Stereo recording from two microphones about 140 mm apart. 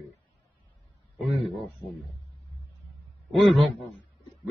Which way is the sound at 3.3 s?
Centre (ahead or behind).